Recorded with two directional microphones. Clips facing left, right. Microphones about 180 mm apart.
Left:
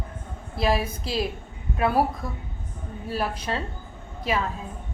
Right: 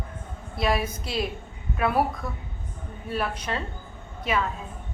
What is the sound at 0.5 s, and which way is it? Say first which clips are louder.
A woman's voice: left 1 dB; 30° left (ahead or behind).